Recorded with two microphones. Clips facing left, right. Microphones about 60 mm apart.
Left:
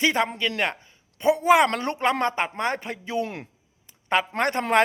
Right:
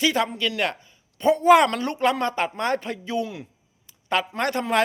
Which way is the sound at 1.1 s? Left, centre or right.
Centre.